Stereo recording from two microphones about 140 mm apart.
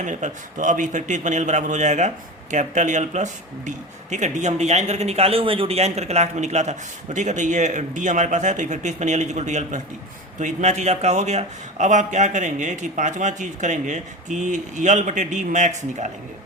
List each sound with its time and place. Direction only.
0.0 s a man's voice: 60° right (ahead or behind)